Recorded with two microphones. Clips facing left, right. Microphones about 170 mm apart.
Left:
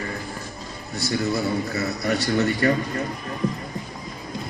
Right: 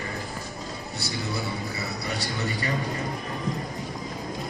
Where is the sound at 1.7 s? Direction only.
65° left (ahead or behind).